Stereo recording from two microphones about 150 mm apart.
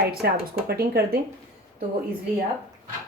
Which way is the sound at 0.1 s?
90° right.